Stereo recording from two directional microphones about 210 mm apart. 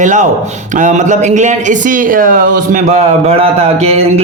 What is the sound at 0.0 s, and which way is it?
Speech, 35° right (ahead or behind).